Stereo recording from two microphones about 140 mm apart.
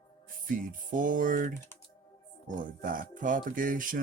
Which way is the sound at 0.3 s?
75° right (ahead or behind).